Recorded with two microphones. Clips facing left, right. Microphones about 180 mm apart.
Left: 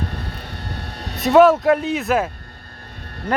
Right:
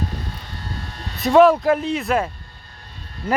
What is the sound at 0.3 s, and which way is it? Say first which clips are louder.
Vehicle: left 2 dB; 65° left (ahead or behind).